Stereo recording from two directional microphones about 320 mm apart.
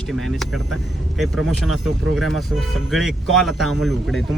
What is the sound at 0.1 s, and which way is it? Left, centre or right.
Speech, centre.